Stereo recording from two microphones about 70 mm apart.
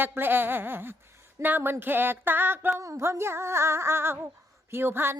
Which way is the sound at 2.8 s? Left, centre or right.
Right.